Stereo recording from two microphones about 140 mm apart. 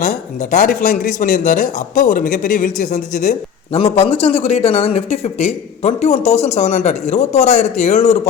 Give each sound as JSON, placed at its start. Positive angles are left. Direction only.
{"t": 0.0, "sound": "speech", "side_deg": 70}
{"t": 3.7, "sound": "speech", "side_deg": 45}